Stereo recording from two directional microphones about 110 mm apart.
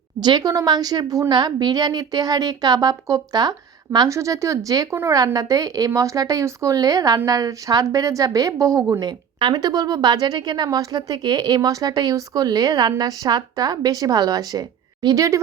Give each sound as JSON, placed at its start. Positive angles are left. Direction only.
{"t": 0.2, "sound": "a woman's voice", "side_deg": -40}